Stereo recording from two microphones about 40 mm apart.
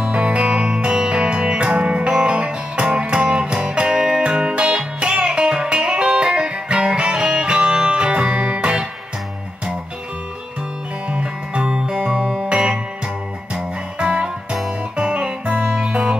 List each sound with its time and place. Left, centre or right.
0.0 s music: right
11.1 s music: right